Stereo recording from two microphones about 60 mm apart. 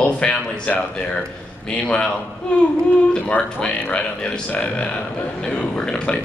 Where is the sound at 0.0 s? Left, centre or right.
Centre.